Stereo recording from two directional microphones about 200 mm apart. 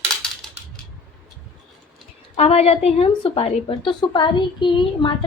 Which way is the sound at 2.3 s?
30° left (ahead or behind).